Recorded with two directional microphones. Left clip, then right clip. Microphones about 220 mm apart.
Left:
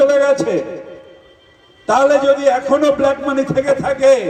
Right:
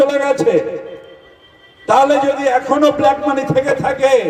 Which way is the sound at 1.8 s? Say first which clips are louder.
Even; 40° right (ahead or behind).